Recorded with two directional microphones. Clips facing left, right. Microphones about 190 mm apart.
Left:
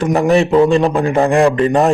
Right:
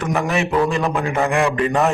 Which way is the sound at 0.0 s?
30° left (ahead or behind).